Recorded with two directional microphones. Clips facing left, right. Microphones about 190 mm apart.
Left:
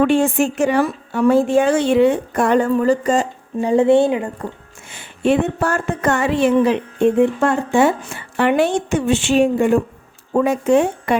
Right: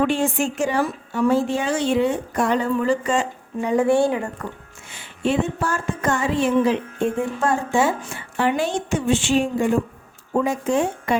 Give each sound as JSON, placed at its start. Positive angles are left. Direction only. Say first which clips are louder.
{"t": 0.1, "sound": "a woman's voice", "louder": "left 6 dB", "side_deg": 65}
{"t": 4.9, "sound": "a woman's voice", "louder": "left 6 dB", "side_deg": 55}